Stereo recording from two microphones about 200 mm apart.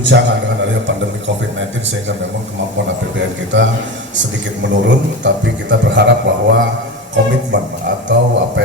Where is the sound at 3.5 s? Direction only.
65° right (ahead or behind).